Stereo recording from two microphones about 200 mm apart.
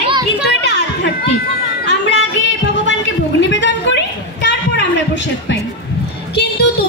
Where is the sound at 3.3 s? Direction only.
60° left (ahead or behind).